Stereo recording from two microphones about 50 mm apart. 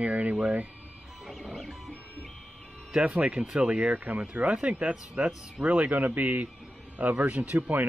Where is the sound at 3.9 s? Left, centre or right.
Right.